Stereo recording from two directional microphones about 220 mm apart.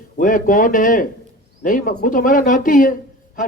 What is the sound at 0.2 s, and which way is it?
Speech, 40° left (ahead or behind).